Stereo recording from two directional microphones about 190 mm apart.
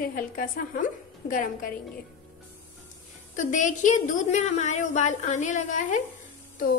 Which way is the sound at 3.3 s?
40° left (ahead or behind).